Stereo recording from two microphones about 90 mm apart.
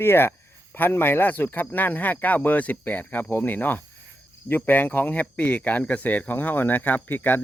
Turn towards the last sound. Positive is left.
turn(degrees=20)  # may be behind; listen again after turning